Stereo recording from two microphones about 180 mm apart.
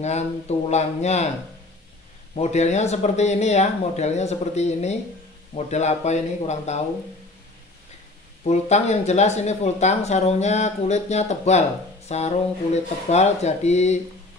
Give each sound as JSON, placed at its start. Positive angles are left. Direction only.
{"t": 0.0, "sound": "speech", "side_deg": 40}
{"t": 2.3, "sound": "speech", "side_deg": 40}
{"t": 8.5, "sound": "speech", "side_deg": 40}